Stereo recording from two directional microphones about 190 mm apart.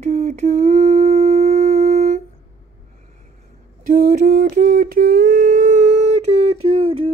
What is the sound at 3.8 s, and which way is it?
Humming, 50° right (ahead or behind).